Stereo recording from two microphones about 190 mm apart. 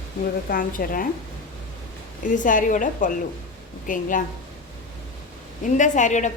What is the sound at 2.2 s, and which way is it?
A woman's voice, 45° left (ahead or behind).